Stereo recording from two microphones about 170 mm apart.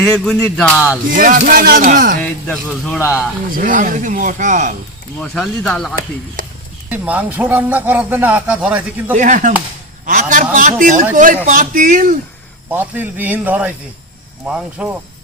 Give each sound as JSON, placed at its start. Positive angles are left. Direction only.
{"t": 0.4, "sound": "speech", "side_deg": 5}
{"t": 1.1, "sound": "speech", "side_deg": -55}
{"t": 2.2, "sound": "speech", "side_deg": 5}
{"t": 3.5, "sound": "a man's voice", "side_deg": -55}
{"t": 5.2, "sound": "speech", "side_deg": 5}
{"t": 6.4, "sound": "a sound", "side_deg": -55}
{"t": 6.9, "sound": "speech", "side_deg": -10}
{"t": 9.1, "sound": "a man's voice", "side_deg": -45}
{"t": 12.7, "sound": "speech", "side_deg": -10}